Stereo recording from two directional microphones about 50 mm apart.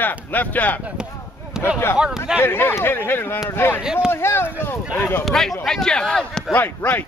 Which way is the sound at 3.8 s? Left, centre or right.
Centre.